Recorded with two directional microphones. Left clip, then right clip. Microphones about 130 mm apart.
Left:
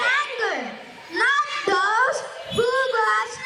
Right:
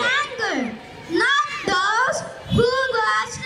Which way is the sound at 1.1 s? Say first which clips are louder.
Right 1 dB; 20° right (ahead or behind).